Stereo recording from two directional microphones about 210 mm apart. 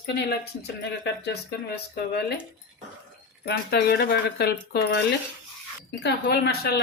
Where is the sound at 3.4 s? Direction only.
50° left (ahead or behind).